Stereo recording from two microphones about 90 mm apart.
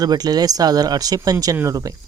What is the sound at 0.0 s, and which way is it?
Speech, 45° right (ahead or behind).